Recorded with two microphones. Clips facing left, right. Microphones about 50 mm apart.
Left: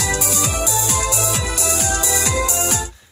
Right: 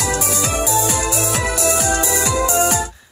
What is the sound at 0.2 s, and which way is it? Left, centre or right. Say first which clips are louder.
Music: right 2 dB; right.